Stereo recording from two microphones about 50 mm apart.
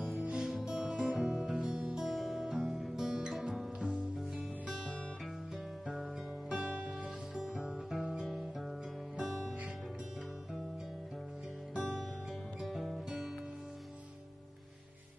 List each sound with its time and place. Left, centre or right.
0.1 s music: right
0.5 s music: centre
2.0 s music: centre
6.5 s music: right
7.3 s guitar: centre
8.3 s music: centre
12.5 s music: centre